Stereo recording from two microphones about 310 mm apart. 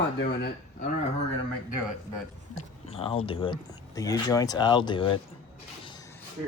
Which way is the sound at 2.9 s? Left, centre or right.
Centre.